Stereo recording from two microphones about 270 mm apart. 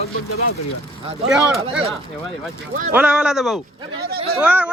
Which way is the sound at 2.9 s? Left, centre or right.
Centre.